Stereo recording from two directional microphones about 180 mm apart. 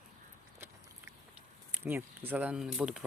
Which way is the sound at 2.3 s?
10° right (ahead or behind).